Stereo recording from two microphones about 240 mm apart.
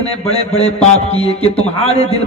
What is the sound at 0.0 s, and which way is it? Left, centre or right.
Speech, left.